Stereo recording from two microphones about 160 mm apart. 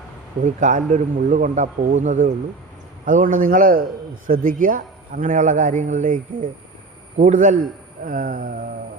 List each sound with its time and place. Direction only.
0.4 s a man's voice: 50° right (ahead or behind)
8.0 s a man's voice: 60° right (ahead or behind)